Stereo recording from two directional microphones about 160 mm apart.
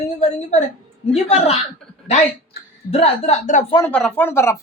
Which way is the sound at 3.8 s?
10° left (ahead or behind).